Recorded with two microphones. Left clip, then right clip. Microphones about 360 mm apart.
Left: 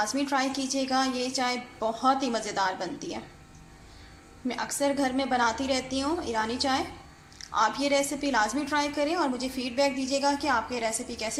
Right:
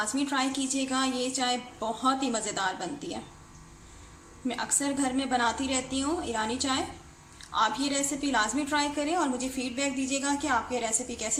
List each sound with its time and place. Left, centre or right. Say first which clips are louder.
0.2 s a woman's voice: left 1 dB; centre
4.4 s a woman's voice: left 3 dB; centre